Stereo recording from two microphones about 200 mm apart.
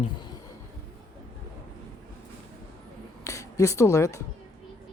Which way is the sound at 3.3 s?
15° left (ahead or behind).